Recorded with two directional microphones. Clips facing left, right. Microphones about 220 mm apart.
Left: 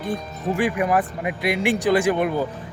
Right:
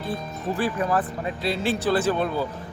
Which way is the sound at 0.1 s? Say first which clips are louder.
Left 3 dB; 15° left (ahead or behind).